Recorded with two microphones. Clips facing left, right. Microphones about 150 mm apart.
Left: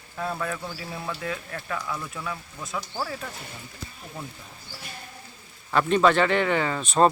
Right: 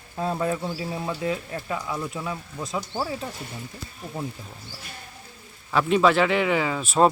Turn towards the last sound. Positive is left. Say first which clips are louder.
# right 1 dB
turn(degrees=-5)  # may be behind; listen again after turning